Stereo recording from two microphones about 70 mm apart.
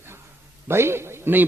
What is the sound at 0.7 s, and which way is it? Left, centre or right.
Speech, right.